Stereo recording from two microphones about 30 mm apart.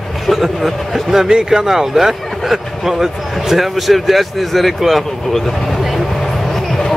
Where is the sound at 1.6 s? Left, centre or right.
Centre.